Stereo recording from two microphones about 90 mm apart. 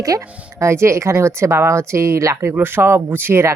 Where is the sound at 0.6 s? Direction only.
30° right (ahead or behind).